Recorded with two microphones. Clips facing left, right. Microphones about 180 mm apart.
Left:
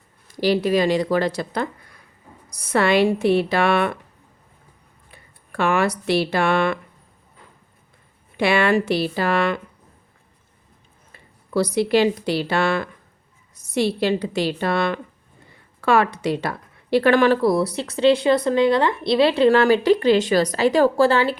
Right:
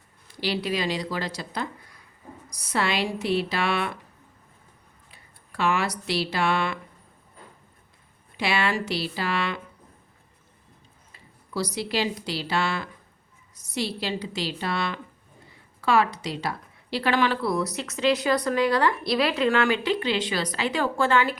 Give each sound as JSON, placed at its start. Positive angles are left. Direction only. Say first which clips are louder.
{"t": 0.3, "sound": "speech", "louder": "left 9 dB", "side_deg": 45}
{"t": 5.1, "sound": "speech", "louder": "left 7 dB", "side_deg": 55}
{"t": 8.4, "sound": "speech", "louder": "left 8 dB", "side_deg": 55}
{"t": 11.1, "sound": "speech", "louder": "left 9 dB", "side_deg": 55}